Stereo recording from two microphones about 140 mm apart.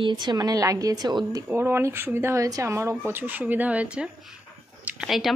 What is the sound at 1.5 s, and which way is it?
Speech, 15° right (ahead or behind).